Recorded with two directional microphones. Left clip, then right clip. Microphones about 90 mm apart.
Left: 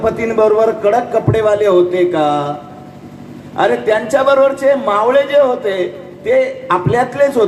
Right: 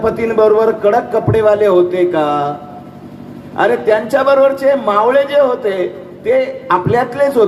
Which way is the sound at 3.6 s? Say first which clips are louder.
Right 1 dB; 20° right (ahead or behind).